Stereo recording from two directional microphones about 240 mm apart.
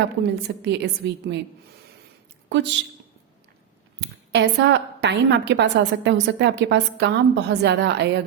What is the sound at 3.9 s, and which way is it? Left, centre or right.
A woman's voice, right.